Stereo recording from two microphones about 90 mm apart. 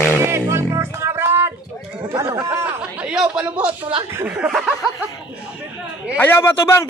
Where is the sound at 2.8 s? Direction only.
10° right (ahead or behind).